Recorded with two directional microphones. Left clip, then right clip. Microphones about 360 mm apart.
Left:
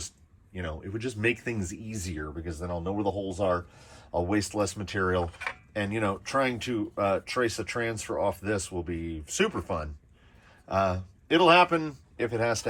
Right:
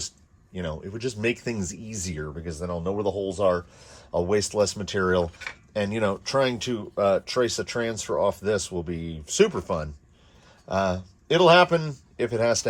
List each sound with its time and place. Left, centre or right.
0.5 s speech: centre